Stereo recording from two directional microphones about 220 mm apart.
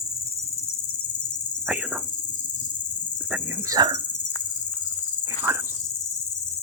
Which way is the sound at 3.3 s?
15° right (ahead or behind).